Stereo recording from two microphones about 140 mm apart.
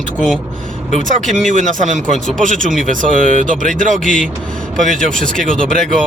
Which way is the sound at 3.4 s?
70° right (ahead or behind).